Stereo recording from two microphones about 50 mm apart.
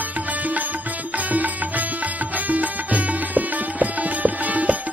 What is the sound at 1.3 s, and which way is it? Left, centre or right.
Music, right.